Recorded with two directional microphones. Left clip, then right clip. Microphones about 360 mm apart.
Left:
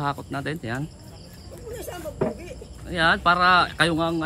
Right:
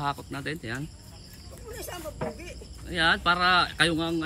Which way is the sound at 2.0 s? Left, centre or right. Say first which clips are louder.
Left 8 dB; centre.